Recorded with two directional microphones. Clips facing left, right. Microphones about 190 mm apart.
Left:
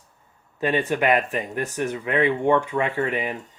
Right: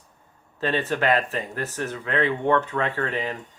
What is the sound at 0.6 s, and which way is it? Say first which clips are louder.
Speech: left 2 dB; 15° left (ahead or behind).